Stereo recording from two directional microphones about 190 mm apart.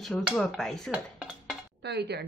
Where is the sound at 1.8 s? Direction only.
60° right (ahead or behind).